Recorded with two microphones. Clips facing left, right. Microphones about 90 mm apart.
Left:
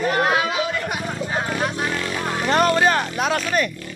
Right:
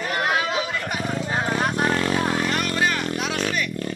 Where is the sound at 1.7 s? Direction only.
40° right (ahead or behind).